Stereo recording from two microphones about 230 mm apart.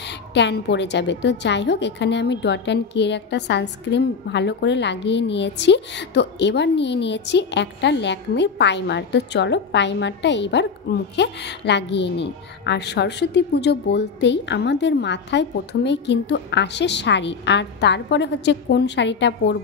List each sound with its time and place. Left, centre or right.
0.3 s a woman's voice: left